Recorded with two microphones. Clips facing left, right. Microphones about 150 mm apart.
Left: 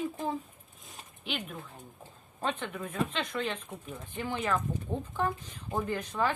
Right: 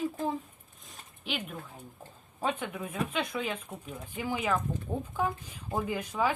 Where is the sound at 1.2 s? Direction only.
Centre (ahead or behind).